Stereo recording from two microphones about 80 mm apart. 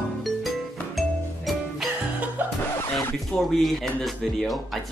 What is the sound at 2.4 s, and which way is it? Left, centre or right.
Music, right.